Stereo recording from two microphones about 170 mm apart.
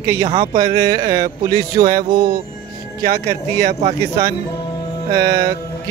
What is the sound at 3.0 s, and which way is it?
Speech, 60° right (ahead or behind).